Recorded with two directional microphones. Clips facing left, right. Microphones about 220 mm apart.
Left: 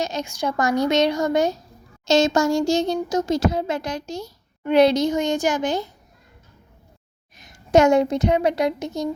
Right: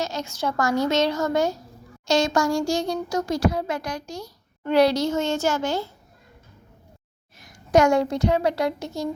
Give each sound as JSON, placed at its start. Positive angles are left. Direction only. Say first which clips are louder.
{"t": 0.0, "sound": "a woman's voice", "louder": "left 2 dB", "side_deg": 15}
{"t": 7.3, "sound": "a woman's voice", "louder": "left 2 dB", "side_deg": 25}